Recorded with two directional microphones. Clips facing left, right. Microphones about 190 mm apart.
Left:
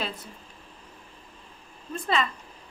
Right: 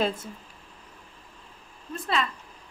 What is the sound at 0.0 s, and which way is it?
Speech, 45° right (ahead or behind).